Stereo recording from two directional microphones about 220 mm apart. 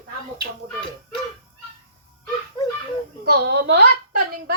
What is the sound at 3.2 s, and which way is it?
A woman's voice, 45° right (ahead or behind).